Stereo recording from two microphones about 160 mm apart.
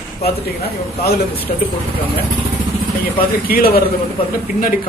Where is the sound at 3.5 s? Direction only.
70° left (ahead or behind).